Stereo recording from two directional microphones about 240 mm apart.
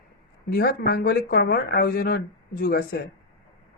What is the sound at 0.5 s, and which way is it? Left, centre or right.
Speech, left.